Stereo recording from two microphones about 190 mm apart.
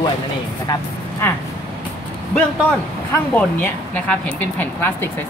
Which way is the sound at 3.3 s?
10° left (ahead or behind).